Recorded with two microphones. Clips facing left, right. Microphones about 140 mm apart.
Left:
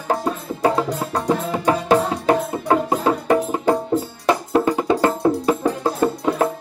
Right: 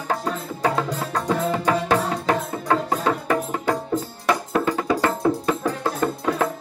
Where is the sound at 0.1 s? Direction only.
25° left (ahead or behind).